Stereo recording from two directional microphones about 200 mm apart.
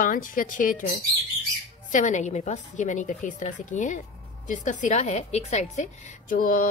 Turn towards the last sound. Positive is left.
turn(degrees=45)  # may be behind; listen again after turning